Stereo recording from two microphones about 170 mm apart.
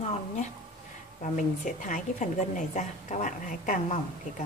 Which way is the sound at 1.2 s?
50° left (ahead or behind).